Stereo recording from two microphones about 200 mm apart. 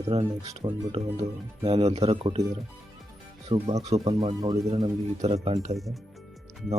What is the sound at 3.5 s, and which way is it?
Speech, 25° right (ahead or behind).